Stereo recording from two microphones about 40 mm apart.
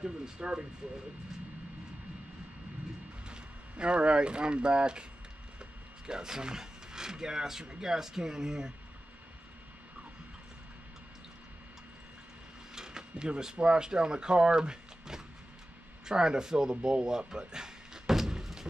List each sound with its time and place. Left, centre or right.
0.0 s speech: right
3.3 s speech: right
6.0 s speech: centre
12.7 s a sound: centre
13.6 s speech: right